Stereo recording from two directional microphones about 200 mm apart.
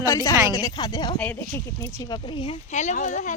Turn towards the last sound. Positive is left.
turn(degrees=40)  # may be behind; listen again after turning